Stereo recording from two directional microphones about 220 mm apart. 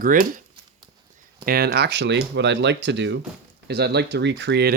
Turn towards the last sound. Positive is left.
turn(degrees=-50)  # may be behind; listen again after turning